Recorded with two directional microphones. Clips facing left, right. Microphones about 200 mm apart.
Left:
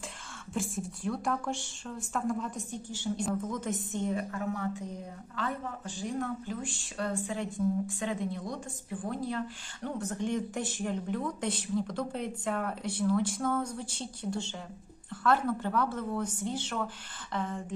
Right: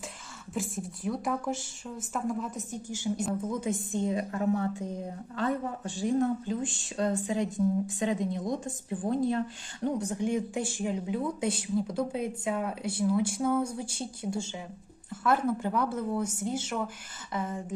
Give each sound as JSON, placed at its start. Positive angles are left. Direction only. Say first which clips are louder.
{"t": 0.5, "sound": "a woman's voice", "louder": "even", "side_deg": 0}
{"t": 4.3, "sound": "a woman's voice", "louder": "right 5 dB", "side_deg": -30}